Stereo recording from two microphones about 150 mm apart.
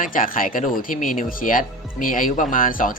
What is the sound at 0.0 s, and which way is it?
Speech, 65° left (ahead or behind).